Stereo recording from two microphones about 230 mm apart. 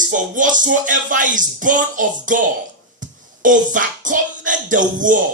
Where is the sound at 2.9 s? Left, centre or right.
Right.